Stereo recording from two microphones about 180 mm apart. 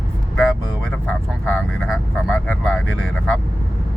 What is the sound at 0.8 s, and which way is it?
Speech, 5° left (ahead or behind).